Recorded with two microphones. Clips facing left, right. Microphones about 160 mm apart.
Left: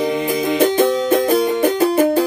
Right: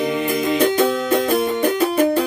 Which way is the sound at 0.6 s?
25° left (ahead or behind).